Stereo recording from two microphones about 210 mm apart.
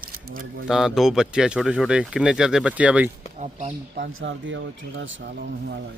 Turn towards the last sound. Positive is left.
turn(degrees=-50)  # may be behind; listen again after turning